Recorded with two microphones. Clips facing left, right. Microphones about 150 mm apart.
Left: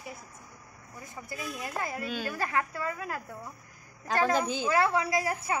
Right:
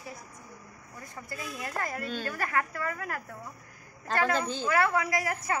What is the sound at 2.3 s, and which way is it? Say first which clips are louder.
Speech: even; 20° left (ahead or behind).